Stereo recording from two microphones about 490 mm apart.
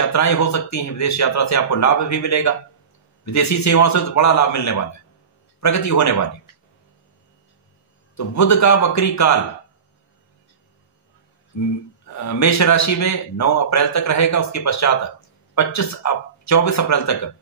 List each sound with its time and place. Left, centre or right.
0.1 s a man's voice: left
8.2 s a man's voice: left
11.5 s a man's voice: left